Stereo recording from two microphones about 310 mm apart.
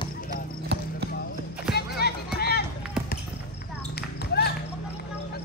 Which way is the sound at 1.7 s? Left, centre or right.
Left.